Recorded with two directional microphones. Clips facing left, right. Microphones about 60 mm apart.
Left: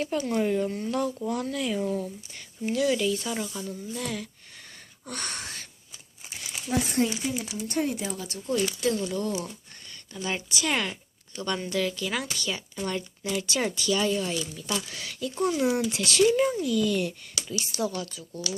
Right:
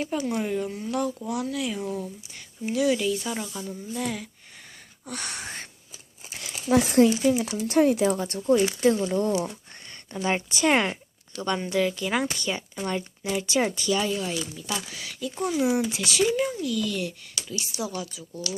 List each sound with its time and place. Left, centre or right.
0.0 s speech: centre
6.7 s speech: right
8.2 s speech: right
8.8 s speech: right
14.0 s speech: centre
17.7 s speech: centre